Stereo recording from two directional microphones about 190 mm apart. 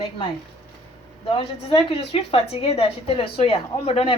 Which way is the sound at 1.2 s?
30° left (ahead or behind).